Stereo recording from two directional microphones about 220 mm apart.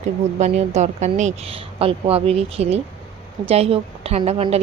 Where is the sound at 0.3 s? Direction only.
30° right (ahead or behind).